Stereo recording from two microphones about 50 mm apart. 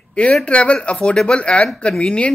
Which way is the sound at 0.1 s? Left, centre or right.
Left.